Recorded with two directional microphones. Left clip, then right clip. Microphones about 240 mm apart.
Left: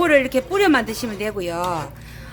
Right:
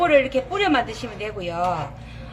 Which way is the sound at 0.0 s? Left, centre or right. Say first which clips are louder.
Left 1 dB; left.